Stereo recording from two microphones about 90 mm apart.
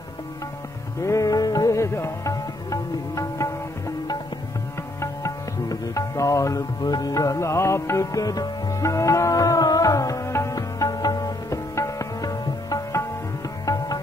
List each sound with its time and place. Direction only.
1.0 s music: 40° left (ahead or behind)
5.0 s music: 35° left (ahead or behind)